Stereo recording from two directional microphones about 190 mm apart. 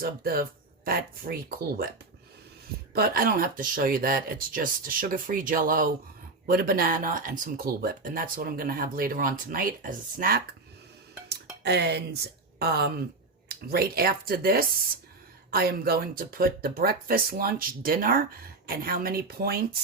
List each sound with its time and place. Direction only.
0.0 s speech: 50° right (ahead or behind)
2.9 s speech: 55° right (ahead or behind)
11.3 s speech: 60° right (ahead or behind)